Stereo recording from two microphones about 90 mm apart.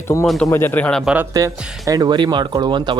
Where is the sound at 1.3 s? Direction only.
40° right (ahead or behind); by 2.9 s 60° right (ahead or behind).